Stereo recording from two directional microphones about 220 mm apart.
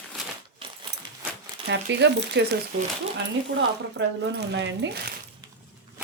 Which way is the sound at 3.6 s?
55° right (ahead or behind).